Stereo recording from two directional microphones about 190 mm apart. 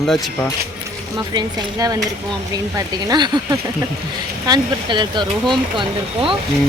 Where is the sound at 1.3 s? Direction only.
20° right (ahead or behind).